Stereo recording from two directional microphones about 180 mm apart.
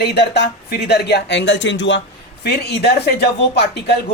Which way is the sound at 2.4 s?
65° left (ahead or behind).